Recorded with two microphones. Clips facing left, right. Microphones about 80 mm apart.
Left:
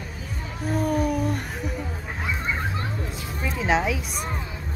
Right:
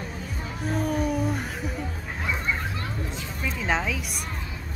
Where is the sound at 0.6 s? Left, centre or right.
Centre.